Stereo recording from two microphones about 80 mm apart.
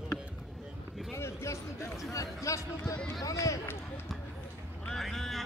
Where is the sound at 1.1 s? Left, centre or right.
Left.